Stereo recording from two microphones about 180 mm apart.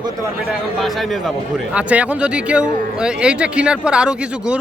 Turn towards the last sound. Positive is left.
turn(degrees=-5)  # may be behind; listen again after turning